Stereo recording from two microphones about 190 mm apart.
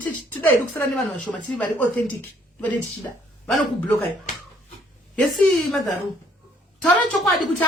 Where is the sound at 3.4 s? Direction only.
5° left (ahead or behind).